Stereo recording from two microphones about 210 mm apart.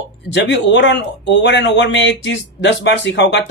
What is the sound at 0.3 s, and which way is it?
Speech, 60° left (ahead or behind).